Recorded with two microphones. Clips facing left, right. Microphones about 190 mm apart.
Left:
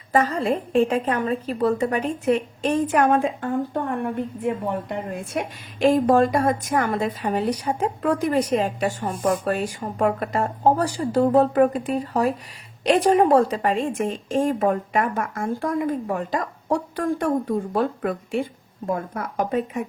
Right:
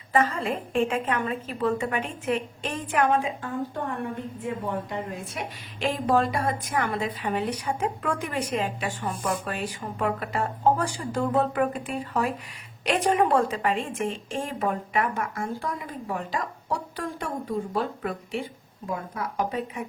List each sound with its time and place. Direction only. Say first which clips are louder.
0.1 s a woman's voice: left 4 dB; 40° left (ahead or behind)